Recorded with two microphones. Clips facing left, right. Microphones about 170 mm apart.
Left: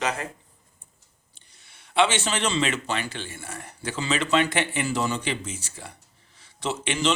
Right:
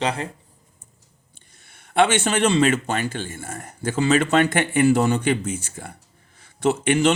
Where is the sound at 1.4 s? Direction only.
50° right (ahead or behind).